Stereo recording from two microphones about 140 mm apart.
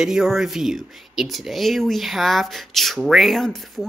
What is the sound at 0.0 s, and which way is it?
Speech, 5° right (ahead or behind).